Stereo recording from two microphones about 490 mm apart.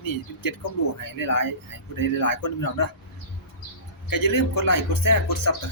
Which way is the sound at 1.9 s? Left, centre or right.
Left.